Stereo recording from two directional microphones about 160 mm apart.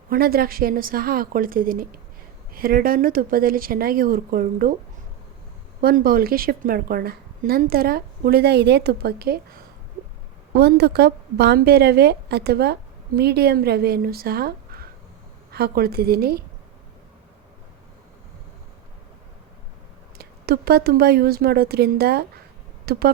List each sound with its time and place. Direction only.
0.1 s a woman's voice: 70° right (ahead or behind)
5.8 s a woman's voice: 65° right (ahead or behind)
10.5 s a woman's voice: 90° right; by 16.4 s 75° right (ahead or behind)
20.1 s a woman's voice: 70° right (ahead or behind)